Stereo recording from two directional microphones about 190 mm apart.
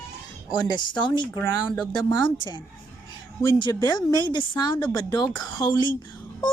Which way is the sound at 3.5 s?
25° left (ahead or behind).